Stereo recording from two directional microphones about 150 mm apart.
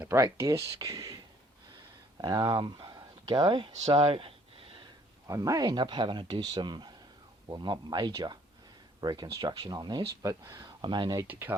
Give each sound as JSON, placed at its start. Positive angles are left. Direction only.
{"t": 0.0, "sound": "speech", "side_deg": -20}
{"t": 2.2, "sound": "speech", "side_deg": -30}
{"t": 5.3, "sound": "speech", "side_deg": -25}
{"t": 11.3, "sound": "speech", "side_deg": -15}